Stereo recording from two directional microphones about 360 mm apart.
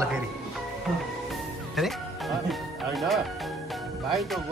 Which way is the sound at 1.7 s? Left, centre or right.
Centre.